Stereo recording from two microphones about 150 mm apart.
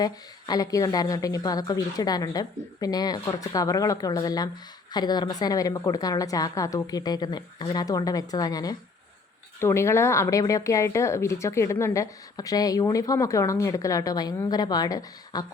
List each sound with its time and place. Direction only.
0.0 s speech: 25° left (ahead or behind)